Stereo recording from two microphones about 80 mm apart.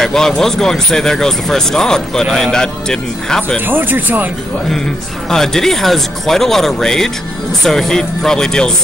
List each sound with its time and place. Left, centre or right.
0.0 s speech: centre
3.6 s speech: right
5.3 s speech: centre